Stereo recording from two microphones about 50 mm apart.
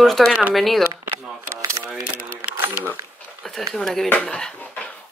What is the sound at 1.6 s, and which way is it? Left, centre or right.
Camera, right.